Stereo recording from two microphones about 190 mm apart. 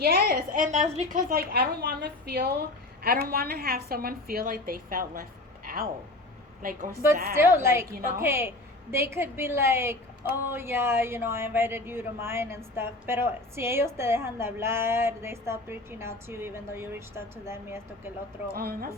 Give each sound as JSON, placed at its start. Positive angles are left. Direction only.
{"t": 0.0, "sound": "a woman's voice", "side_deg": -55}
{"t": 7.3, "sound": "a woman's voice", "side_deg": -15}
{"t": 18.5, "sound": "a woman's voice", "side_deg": -50}